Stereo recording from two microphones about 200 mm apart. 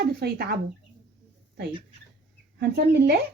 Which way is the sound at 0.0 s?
50° right (ahead or behind).